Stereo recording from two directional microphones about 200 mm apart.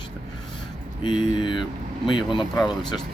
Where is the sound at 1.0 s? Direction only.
25° left (ahead or behind).